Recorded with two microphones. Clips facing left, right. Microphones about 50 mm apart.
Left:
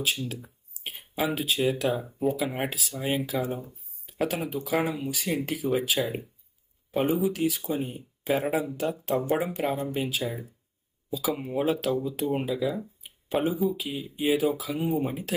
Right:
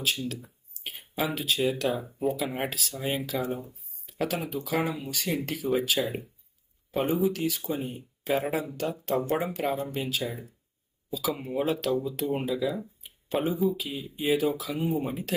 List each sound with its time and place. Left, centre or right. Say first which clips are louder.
1.1 s speech: left 1 dB; centre
4.9 s speech: left 2 dB; centre
5.1 s speech: left 1 dB; centre